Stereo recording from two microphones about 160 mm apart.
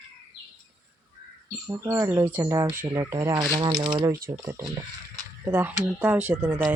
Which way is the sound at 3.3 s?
30° right (ahead or behind).